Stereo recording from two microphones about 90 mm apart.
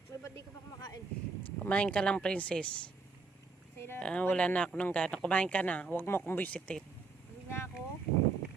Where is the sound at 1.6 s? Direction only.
15° left (ahead or behind).